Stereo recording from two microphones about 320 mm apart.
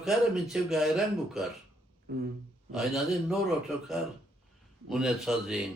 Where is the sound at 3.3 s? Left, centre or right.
Centre.